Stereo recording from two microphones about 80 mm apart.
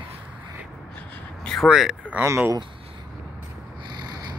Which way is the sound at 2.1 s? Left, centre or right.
Centre.